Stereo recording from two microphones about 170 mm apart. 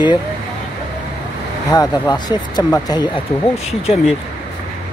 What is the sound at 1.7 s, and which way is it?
Speech, 20° left (ahead or behind).